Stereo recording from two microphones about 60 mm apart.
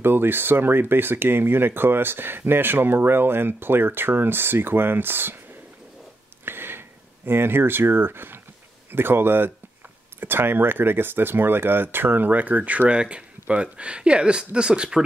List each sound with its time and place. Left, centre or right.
0.0 s speech: right
6.4 s a sound: right
7.2 s speech: right; by 15.0 s centre